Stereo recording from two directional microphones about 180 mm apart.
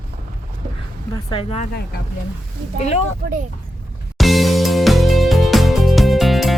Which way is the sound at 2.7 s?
35° left (ahead or behind).